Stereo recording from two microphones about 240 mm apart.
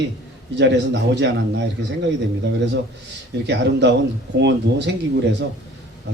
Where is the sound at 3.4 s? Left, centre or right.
Right.